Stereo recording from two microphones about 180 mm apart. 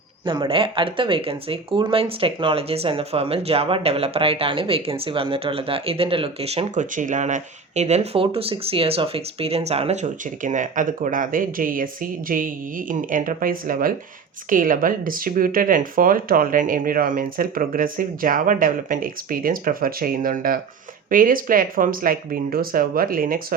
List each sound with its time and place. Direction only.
0.3 s speech: 30° right (ahead or behind); by 23.6 s 50° right (ahead or behind)